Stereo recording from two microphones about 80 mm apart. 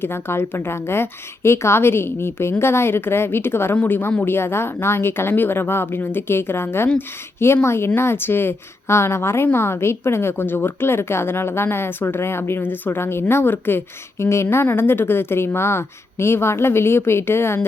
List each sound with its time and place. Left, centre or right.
0.0 s a woman's voice: left